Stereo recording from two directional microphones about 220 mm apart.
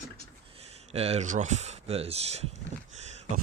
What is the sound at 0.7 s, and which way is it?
Speech, 30° right (ahead or behind).